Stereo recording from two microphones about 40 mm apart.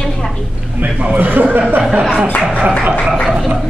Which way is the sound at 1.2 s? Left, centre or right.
Right.